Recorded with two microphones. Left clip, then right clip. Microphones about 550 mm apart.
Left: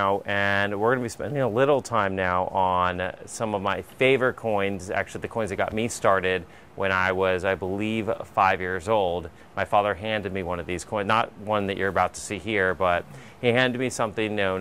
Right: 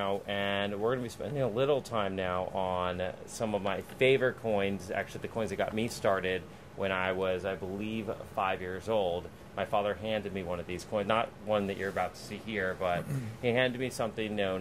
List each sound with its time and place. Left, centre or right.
0.0 s speech: left